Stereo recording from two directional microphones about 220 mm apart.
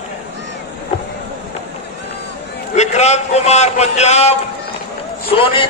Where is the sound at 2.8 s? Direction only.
30° left (ahead or behind).